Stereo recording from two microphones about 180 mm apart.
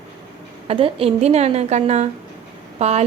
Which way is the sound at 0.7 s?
30° right (ahead or behind).